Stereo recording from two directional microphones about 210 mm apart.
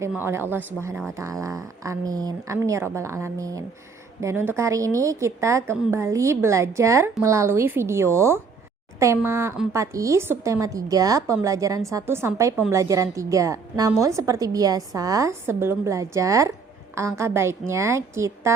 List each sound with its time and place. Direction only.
0.0 s a woman's voice: 10° right (ahead or behind)
5.7 s a woman's voice: 5° right (ahead or behind)
6.0 s a woman's voice: 15° right (ahead or behind)